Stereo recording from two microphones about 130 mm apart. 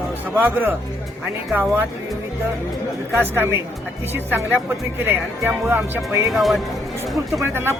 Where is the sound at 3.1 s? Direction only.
20° right (ahead or behind).